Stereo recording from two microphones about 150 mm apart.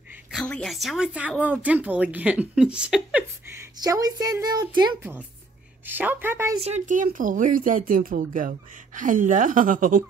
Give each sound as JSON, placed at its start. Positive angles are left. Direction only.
{"t": 0.5, "sound": "speech", "side_deg": 5}
{"t": 3.8, "sound": "a woman's voice", "side_deg": -25}
{"t": 5.9, "sound": "speech", "side_deg": -10}
{"t": 6.6, "sound": "speech", "side_deg": -55}